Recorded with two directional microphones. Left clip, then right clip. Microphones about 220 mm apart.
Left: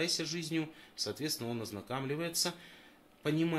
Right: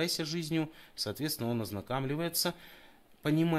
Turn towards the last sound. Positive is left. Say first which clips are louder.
# right 3 dB
turn(degrees=-60)  # may be behind; listen again after turning